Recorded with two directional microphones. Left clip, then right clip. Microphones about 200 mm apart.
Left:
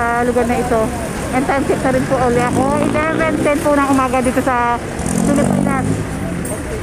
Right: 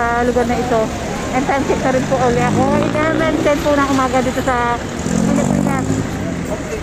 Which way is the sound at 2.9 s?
25° left (ahead or behind).